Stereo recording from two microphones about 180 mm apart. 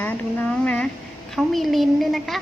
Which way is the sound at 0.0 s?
5° left (ahead or behind).